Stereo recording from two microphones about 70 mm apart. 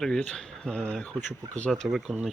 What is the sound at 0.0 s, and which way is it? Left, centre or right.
Speech, centre.